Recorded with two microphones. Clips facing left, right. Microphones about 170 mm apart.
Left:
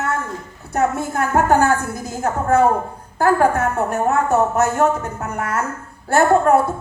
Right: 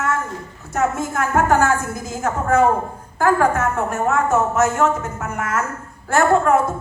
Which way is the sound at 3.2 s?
35° left (ahead or behind).